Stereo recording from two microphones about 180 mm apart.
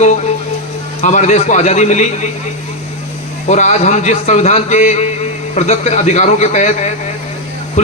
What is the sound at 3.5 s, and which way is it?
A man's voice, 40° left (ahead or behind).